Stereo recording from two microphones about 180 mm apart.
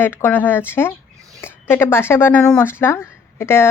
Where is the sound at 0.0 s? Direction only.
10° left (ahead or behind).